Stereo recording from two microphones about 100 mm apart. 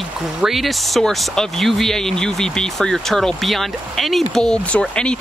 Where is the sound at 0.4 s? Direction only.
Centre (ahead or behind).